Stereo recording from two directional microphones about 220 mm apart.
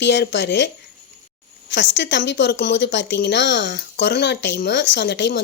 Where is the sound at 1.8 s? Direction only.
55° left (ahead or behind).